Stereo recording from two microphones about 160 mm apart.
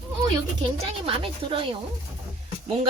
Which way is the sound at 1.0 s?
35° right (ahead or behind).